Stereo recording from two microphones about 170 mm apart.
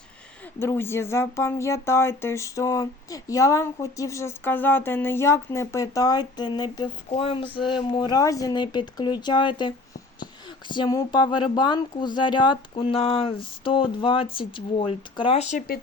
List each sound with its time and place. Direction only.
0.6 s speech: 15° left (ahead or behind)
7.1 s a sound: 35° left (ahead or behind)
7.5 s speech: 30° left (ahead or behind)